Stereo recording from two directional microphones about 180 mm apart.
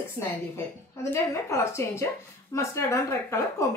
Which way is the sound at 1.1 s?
15° left (ahead or behind).